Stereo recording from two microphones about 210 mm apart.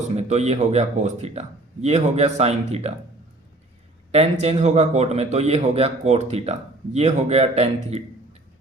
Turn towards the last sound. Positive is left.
turn(degrees=-30)  # may be behind; listen again after turning